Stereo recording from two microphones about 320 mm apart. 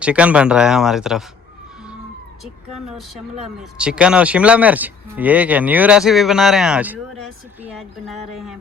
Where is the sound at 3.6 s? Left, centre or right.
Centre.